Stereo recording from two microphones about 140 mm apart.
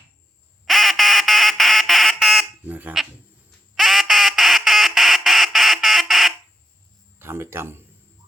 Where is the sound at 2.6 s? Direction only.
10° right (ahead or behind).